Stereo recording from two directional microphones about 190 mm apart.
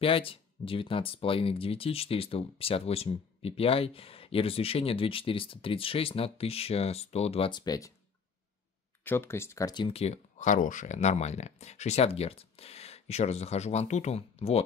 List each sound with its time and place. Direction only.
0.0 s speech: 30° left (ahead or behind)
9.0 s speech: 10° left (ahead or behind); by 14.6 s 35° left (ahead or behind)